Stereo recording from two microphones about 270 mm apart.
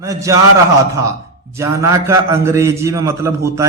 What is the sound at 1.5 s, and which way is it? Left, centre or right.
A man's voice, centre.